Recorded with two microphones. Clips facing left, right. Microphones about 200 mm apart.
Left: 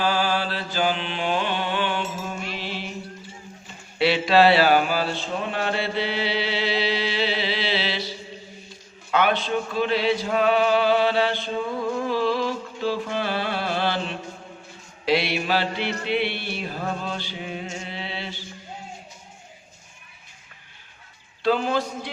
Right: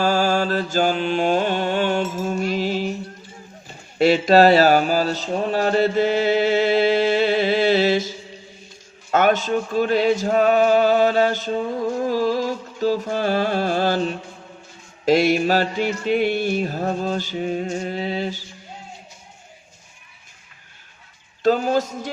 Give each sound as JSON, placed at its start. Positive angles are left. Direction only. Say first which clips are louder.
{"t": 0.0, "sound": "mantra", "louder": "right 5 dB", "side_deg": -45}
{"t": 3.9, "sound": "mantra", "louder": "right 5 dB", "side_deg": -45}
{"t": 12.0, "sound": "music", "louder": "right 3 dB", "side_deg": -40}
{"t": 15.0, "sound": "mantra", "louder": "right 7 dB", "side_deg": -45}
{"t": 21.4, "sound": "mantra", "louder": "right 4 dB", "side_deg": -45}